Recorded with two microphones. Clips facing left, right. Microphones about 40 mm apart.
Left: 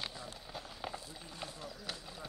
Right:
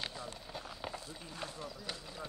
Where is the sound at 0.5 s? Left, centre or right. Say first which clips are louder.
Left 1 dB; centre.